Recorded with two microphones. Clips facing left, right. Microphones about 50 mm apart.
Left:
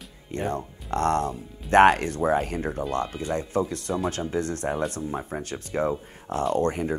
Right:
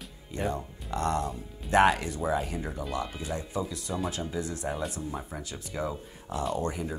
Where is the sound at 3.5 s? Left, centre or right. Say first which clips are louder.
Left 6 dB; left.